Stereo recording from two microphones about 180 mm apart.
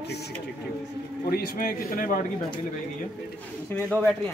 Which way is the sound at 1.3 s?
55° left (ahead or behind).